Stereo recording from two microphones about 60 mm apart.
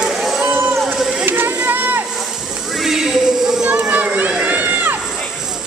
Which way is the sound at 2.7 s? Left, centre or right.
Centre.